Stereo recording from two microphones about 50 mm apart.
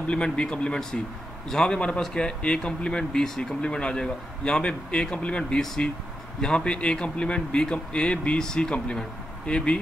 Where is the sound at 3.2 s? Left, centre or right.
Centre.